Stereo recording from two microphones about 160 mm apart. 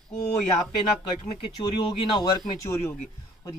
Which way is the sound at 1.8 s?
35° left (ahead or behind).